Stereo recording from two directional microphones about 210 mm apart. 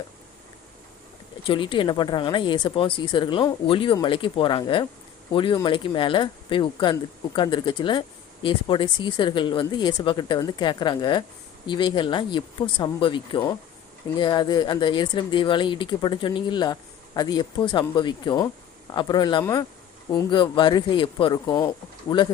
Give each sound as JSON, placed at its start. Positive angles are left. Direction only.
{"t": 1.5, "sound": "speech", "side_deg": 25}